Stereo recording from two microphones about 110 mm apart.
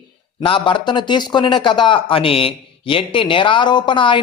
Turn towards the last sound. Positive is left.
turn(degrees=50)  # may be behind; listen again after turning